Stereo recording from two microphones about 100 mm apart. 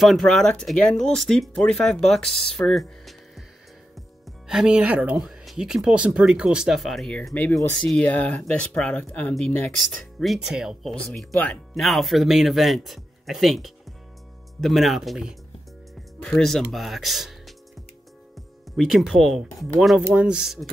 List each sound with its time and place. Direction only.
0.0 s speech: centre (ahead or behind)
4.5 s speech: 10° right (ahead or behind); by 9.7 s 10° left (ahead or behind)
10.2 s speech: 5° right (ahead or behind)
16.2 s speech: 10° left (ahead or behind)
18.8 s speech: centre (ahead or behind)